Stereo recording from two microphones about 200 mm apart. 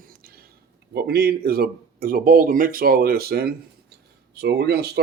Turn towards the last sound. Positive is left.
turn(degrees=-55)  # may be behind; listen again after turning